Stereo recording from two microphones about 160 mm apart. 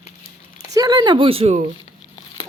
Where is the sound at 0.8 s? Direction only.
25° right (ahead or behind).